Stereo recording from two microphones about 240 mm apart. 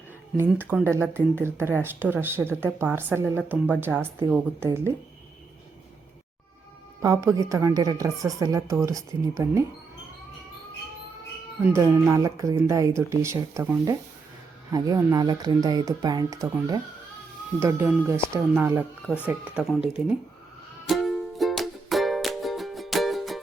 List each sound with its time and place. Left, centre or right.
0.3 s a woman's voice: centre
7.0 s a woman's voice: centre
11.6 s a woman's voice: centre
20.9 s music: centre